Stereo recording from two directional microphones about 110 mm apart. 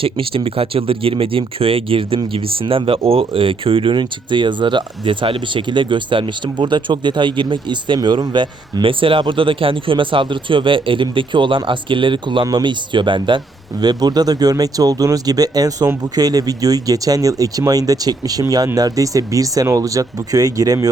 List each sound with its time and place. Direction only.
0.0 s speech: 55° right (ahead or behind); by 20.7 s 35° right (ahead or behind)